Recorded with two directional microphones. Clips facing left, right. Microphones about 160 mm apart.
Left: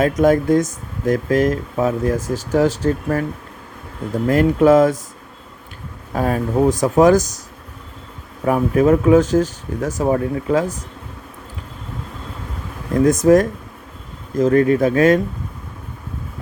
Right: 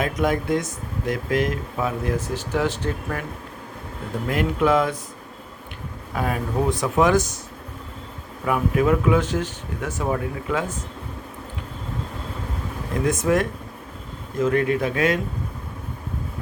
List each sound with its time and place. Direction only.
0.0 s speech: 45° left (ahead or behind)
4.3 s speech: 40° left (ahead or behind)
6.1 s speech: 40° left (ahead or behind)
8.4 s speech: 40° left (ahead or behind)
13.1 s speech: 40° left (ahead or behind)